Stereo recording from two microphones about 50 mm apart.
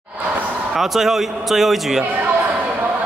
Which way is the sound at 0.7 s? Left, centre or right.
Centre.